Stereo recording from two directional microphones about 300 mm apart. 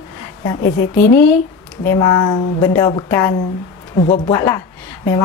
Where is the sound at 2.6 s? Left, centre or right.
Centre.